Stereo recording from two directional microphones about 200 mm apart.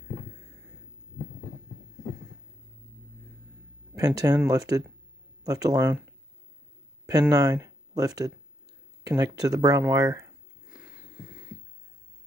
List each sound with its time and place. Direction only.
3.9 s speech: 15° right (ahead or behind)
7.1 s speech: 15° right (ahead or behind)
10.7 s a sound: 5° right (ahead or behind)